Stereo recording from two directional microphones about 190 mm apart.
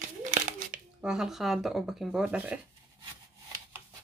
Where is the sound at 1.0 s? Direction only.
5° right (ahead or behind).